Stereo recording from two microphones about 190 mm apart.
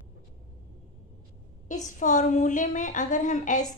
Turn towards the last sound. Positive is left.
turn(degrees=40)  # may be behind; listen again after turning